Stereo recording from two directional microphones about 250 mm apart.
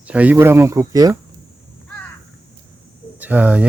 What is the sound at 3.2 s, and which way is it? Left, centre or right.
Speech, centre.